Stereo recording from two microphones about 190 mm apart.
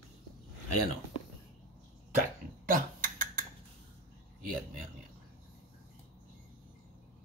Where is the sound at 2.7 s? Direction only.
45° right (ahead or behind).